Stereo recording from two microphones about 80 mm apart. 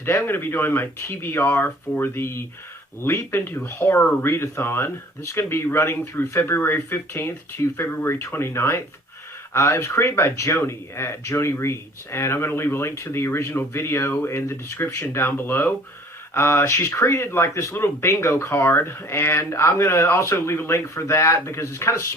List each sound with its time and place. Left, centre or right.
0.0 s speech: left